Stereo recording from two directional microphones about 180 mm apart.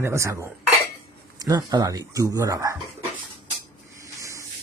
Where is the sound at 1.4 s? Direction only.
20° right (ahead or behind).